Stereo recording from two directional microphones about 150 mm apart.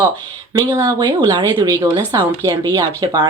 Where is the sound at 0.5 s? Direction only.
25° right (ahead or behind).